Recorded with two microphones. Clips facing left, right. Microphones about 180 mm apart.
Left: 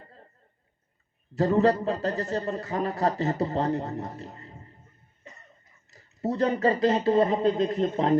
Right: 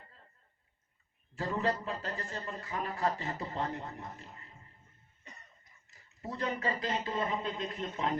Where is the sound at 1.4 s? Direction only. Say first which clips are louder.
Left 11 dB; 40° left (ahead or behind).